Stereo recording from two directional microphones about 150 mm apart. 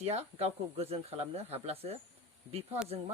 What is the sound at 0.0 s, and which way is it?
Speech, 45° right (ahead or behind).